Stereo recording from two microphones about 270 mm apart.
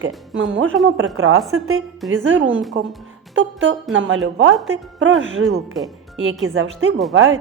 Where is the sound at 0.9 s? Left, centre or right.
Right.